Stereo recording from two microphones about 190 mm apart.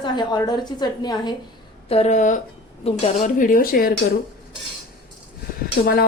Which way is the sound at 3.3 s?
45° left (ahead or behind).